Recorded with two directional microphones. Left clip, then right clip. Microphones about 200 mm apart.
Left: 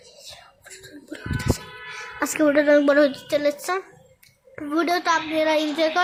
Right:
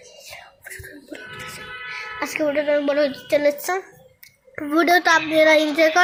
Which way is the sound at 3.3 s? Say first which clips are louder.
Right 3 dB; centre (ahead or behind).